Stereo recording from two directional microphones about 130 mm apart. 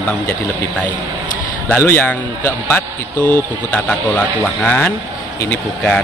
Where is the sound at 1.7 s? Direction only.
15° left (ahead or behind).